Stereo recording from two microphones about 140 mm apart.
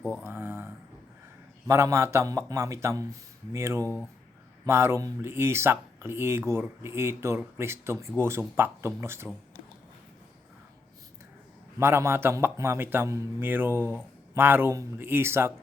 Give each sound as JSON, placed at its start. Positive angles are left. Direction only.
{"t": 0.0, "sound": "speech", "side_deg": 10}
{"t": 0.3, "sound": "a sound", "side_deg": -15}
{"t": 1.6, "sound": "a man's voice", "side_deg": -20}
{"t": 11.8, "sound": "a man's voice", "side_deg": -20}